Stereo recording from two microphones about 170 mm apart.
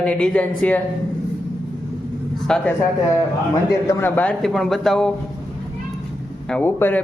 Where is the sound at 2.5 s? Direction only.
5° left (ahead or behind).